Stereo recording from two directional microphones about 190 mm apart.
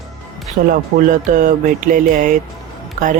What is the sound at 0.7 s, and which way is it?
Speech, 45° right (ahead or behind).